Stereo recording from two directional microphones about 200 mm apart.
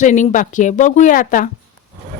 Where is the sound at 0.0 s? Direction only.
40° left (ahead or behind).